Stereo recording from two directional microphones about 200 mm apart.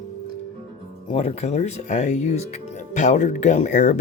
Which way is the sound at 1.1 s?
30° left (ahead or behind).